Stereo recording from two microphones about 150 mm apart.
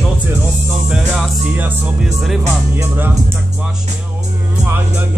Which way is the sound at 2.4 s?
15° right (ahead or behind).